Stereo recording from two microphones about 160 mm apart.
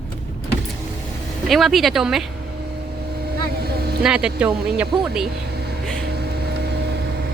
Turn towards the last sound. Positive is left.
turn(degrees=-90)